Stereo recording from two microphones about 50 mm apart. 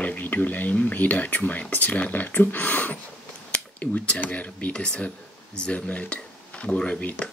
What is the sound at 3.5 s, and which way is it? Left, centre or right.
Speech, left.